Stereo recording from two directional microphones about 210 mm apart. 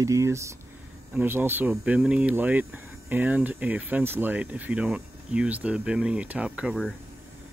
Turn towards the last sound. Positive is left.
turn(degrees=0)  # may be behind; listen again after turning